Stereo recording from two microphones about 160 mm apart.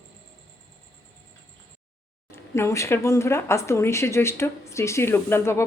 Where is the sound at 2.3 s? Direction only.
15° left (ahead or behind).